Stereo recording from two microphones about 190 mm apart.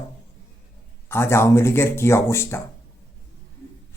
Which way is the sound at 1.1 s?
15° left (ahead or behind).